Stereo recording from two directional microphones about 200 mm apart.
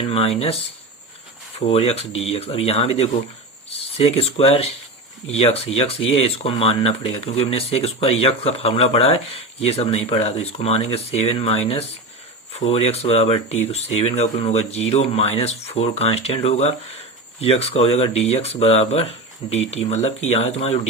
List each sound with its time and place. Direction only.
0.0 s speech: 30° left (ahead or behind)